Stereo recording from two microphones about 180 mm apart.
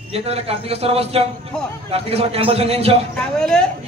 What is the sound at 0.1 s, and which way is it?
A man's voice, 35° right (ahead or behind).